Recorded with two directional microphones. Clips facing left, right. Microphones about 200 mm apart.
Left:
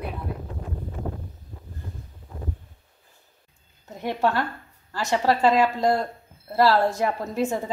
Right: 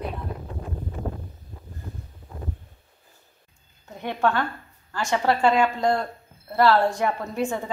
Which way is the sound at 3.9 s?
5° left (ahead or behind).